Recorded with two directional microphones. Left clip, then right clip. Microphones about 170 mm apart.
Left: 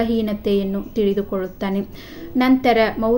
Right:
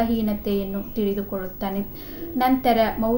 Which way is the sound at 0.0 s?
40° left (ahead or behind).